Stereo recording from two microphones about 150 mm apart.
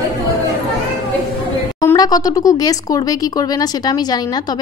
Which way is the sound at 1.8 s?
25° left (ahead or behind).